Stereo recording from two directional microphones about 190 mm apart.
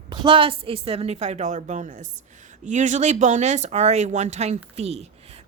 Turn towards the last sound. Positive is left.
turn(degrees=-35)  # may be behind; listen again after turning